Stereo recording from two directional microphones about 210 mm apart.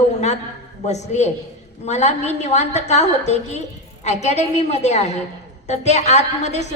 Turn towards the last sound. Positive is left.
turn(degrees=35)  # may be behind; listen again after turning